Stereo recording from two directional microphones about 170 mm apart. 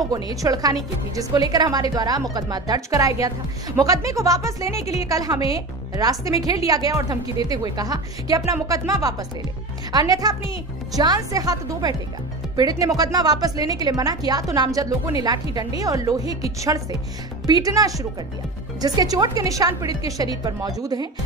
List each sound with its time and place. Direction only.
0.1 s a woman's voice: 20° right (ahead or behind)
4.7 s a woman's voice: 40° left (ahead or behind)
5.0 s a woman's voice: 20° right (ahead or behind)
17.5 s a woman's voice: 20° right (ahead or behind)